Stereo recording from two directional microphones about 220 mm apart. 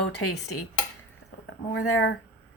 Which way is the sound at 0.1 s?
90° left.